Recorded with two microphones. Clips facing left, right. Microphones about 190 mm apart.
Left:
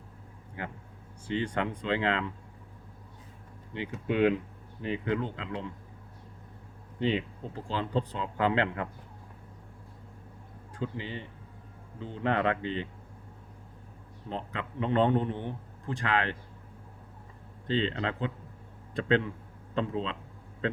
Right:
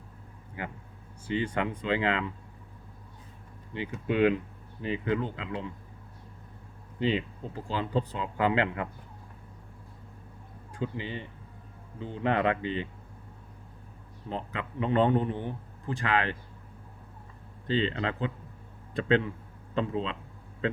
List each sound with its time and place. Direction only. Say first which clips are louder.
0.6 s speech: right 1 dB; 5° right (ahead or behind)
3.8 s a man's voice: right 1 dB; centre (ahead or behind)
7.0 s speech: right 1 dB; centre (ahead or behind)
10.7 s speech: right 2 dB; 15° right (ahead or behind)
14.3 s a man's voice: right 1 dB; 5° right (ahead or behind)
17.7 s a man's voice: right 1 dB; 5° right (ahead or behind)